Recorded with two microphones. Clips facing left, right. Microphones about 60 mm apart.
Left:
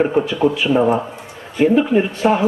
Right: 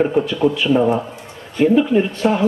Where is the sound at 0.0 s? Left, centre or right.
Centre.